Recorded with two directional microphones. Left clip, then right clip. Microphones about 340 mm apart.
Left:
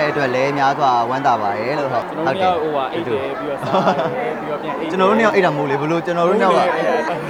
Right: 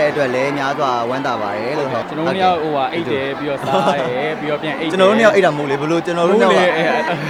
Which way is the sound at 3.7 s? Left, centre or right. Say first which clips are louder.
Even; centre.